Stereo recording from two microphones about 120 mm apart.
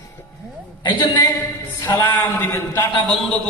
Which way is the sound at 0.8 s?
40° left (ahead or behind).